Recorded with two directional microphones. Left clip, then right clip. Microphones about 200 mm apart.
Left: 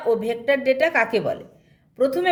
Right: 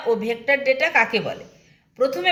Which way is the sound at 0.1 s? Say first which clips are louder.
Even; 55° left (ahead or behind).